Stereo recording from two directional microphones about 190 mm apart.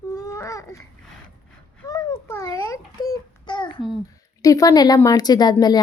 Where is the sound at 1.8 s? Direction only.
20° left (ahead or behind).